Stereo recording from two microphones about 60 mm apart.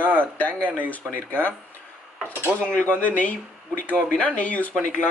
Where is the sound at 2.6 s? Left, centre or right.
Centre.